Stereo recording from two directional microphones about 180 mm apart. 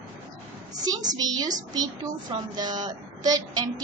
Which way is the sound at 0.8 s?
20° right (ahead or behind).